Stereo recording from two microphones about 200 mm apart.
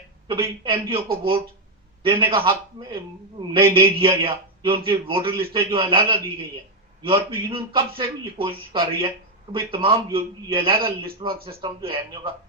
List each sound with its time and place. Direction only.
0.6 s a man's voice: 25° right (ahead or behind)